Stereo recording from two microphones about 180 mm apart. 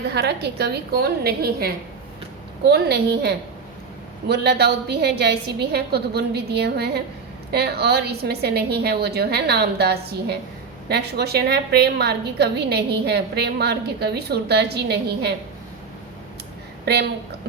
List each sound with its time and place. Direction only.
0.1 s a woman's voice: 65° right (ahead or behind)
16.8 s a woman's voice: 65° right (ahead or behind)